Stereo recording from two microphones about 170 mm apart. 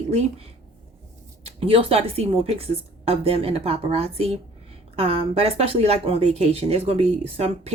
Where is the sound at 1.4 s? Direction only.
35° right (ahead or behind).